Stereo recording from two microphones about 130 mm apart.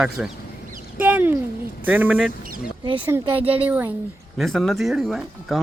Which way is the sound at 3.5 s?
15° right (ahead or behind).